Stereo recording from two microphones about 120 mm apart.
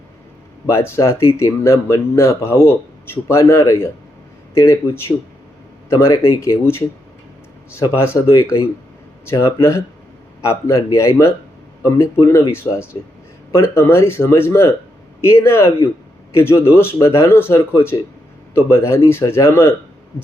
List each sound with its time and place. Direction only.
0.7 s a man's voice: 20° left (ahead or behind)